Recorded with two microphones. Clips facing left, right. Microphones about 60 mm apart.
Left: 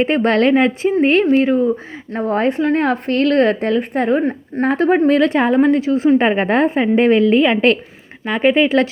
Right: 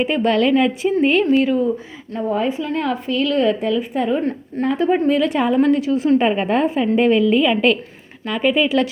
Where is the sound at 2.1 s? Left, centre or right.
Left.